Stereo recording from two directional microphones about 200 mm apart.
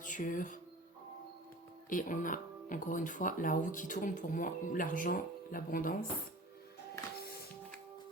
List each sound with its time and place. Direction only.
0.0 s speech: 40° left (ahead or behind)
1.9 s speech: 40° left (ahead or behind)